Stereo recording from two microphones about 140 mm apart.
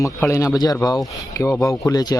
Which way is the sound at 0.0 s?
20° left (ahead or behind).